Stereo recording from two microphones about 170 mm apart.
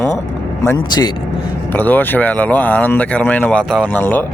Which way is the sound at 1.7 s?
10° left (ahead or behind).